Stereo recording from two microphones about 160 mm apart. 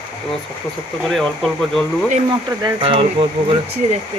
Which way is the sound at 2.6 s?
30° right (ahead or behind).